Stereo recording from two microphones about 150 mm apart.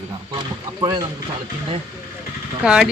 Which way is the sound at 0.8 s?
25° right (ahead or behind).